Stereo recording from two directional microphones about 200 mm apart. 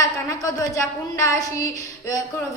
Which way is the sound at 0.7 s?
15° left (ahead or behind).